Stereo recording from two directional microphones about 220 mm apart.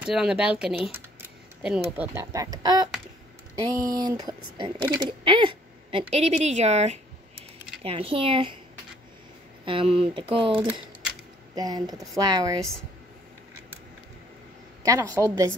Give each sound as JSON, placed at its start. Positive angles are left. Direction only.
{"t": 0.0, "sound": "speech", "side_deg": 0}
{"t": 3.9, "sound": "speech", "side_deg": -20}
{"t": 9.7, "sound": "speech", "side_deg": -25}
{"t": 14.8, "sound": "speech", "side_deg": -15}